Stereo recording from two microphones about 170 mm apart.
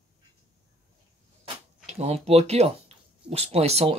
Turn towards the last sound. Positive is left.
turn(degrees=-40)  # may be behind; listen again after turning